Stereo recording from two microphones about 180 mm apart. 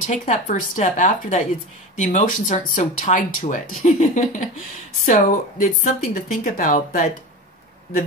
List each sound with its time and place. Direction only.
0.0 s speech: 40° left (ahead or behind)